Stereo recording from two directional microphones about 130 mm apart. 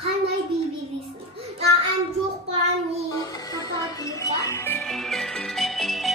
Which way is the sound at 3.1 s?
30° left (ahead or behind).